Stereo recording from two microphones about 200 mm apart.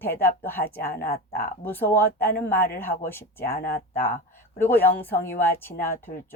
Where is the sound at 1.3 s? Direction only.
10° left (ahead or behind).